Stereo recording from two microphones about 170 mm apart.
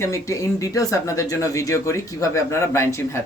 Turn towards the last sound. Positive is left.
turn(degrees=15)  # may be behind; listen again after turning